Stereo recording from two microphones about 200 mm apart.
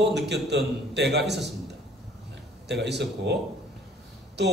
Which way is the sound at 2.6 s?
60° right (ahead or behind).